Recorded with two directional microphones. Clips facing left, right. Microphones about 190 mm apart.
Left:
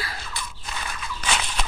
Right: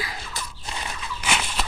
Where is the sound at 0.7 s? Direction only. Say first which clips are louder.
Right 1 dB; 25° right (ahead or behind).